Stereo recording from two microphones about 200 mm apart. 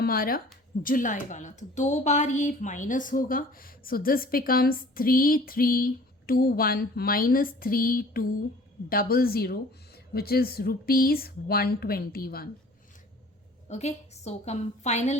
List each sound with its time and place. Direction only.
0.0 s speech: 45° left (ahead or behind)
13.7 s a woman's voice: 35° left (ahead or behind)